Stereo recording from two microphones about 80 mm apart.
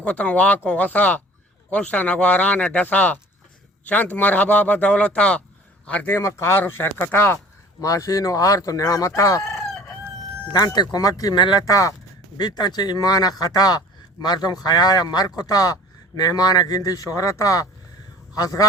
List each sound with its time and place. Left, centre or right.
0.0 s speech: centre
6.1 s speech: left
7.8 s speech: left
10.5 s speech: left
11.6 s speech: left
12.4 s speech: left